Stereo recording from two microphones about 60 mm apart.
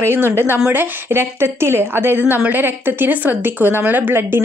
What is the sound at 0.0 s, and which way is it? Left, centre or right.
Speech, right.